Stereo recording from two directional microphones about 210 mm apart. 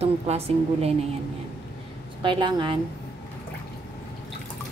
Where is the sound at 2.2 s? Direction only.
25° right (ahead or behind).